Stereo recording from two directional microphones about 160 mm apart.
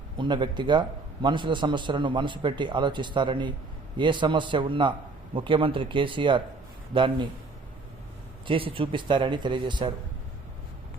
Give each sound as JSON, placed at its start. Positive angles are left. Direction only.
{"t": 0.2, "sound": "a man's voice", "side_deg": -30}
{"t": 8.4, "sound": "a man's voice", "side_deg": -35}